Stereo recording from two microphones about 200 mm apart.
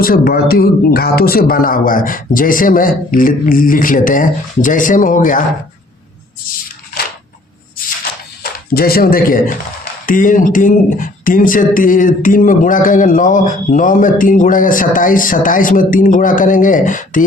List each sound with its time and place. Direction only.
0.0 s speech: 45° left (ahead or behind)
8.7 s speech: 50° left (ahead or behind)